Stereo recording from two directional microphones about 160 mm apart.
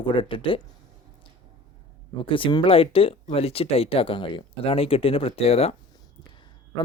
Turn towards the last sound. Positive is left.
turn(degrees=40)  # may be behind; listen again after turning